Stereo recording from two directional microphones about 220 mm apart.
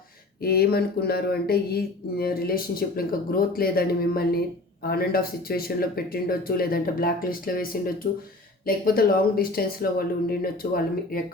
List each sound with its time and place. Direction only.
0.4 s speech: 45° left (ahead or behind)